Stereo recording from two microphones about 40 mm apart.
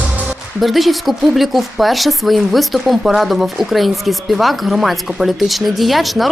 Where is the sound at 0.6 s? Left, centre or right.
Centre.